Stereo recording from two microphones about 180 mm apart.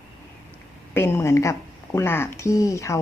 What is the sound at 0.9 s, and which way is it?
A woman's voice, 15° left (ahead or behind).